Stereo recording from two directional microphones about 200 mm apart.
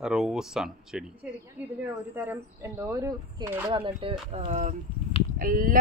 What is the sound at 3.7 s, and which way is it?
Speech, 25° right (ahead or behind).